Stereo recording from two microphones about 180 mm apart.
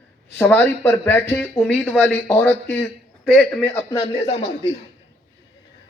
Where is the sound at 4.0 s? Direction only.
35° left (ahead or behind).